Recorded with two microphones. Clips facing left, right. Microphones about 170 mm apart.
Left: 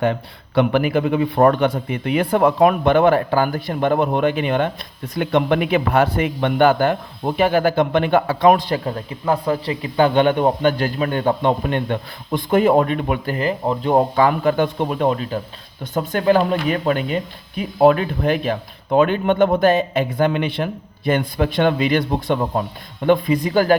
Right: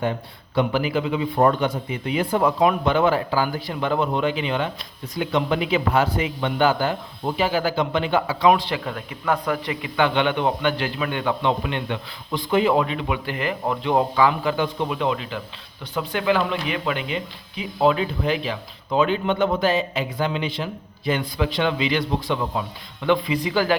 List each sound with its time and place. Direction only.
0.0 s speech: 70° left (ahead or behind); by 8.8 s 45° left (ahead or behind)
8.8 s speech: 30° left (ahead or behind)